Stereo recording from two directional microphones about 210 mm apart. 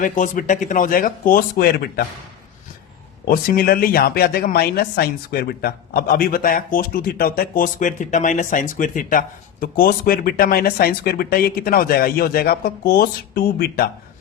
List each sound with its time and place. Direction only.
0.0 s speech: 40° left (ahead or behind)
3.2 s speech: 45° left (ahead or behind)